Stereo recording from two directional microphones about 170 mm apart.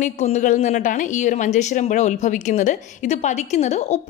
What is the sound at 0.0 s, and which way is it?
A woman's voice, 45° left (ahead or behind).